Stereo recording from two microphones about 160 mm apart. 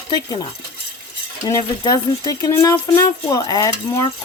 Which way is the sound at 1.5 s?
25° left (ahead or behind).